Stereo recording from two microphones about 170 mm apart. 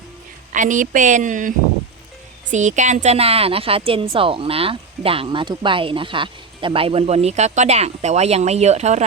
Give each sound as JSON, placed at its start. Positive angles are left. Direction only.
{"t": 0.5, "sound": "a woman's voice", "side_deg": -50}